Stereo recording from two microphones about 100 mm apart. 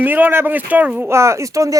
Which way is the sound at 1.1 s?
30° right (ahead or behind).